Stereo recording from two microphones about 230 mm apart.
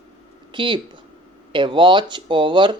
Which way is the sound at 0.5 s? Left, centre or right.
Right.